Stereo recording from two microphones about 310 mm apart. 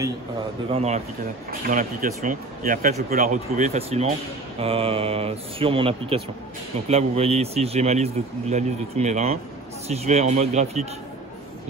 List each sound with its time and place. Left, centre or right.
0.7 s a man's voice: centre